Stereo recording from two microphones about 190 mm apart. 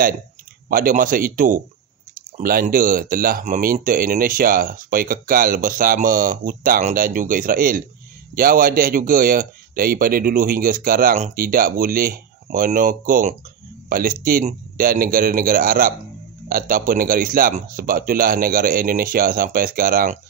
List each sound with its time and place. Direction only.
0.7 s speech: 50° right (ahead or behind)
2.6 s speech: 45° right (ahead or behind)